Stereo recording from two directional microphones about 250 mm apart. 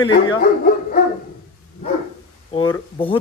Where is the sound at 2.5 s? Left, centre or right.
Centre.